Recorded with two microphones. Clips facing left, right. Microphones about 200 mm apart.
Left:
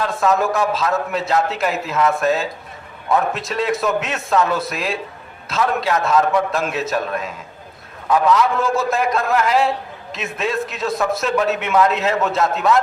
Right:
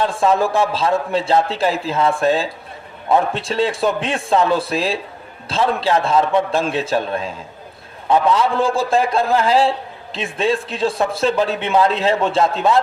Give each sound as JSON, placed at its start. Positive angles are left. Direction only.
{"t": 0.0, "sound": "a man's voice", "side_deg": -30}